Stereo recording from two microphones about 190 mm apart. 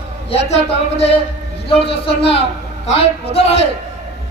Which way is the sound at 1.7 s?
30° left (ahead or behind).